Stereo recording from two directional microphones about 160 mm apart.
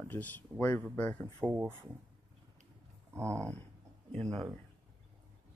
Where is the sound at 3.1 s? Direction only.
20° right (ahead or behind).